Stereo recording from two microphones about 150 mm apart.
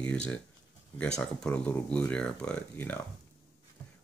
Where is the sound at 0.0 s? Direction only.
5° left (ahead or behind).